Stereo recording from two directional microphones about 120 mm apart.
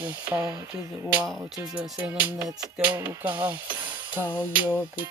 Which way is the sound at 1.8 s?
10° right (ahead or behind).